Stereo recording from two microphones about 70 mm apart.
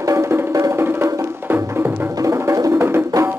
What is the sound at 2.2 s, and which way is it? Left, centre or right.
Music, right.